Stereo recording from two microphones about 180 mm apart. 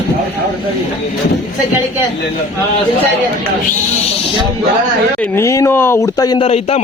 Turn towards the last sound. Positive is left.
turn(degrees=35)  # may be behind; listen again after turning